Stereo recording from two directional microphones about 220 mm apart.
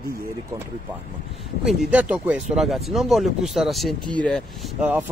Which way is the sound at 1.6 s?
Centre (ahead or behind).